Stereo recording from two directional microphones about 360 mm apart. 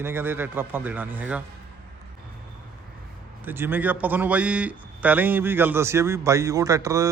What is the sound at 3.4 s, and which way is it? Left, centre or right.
A man's voice, centre.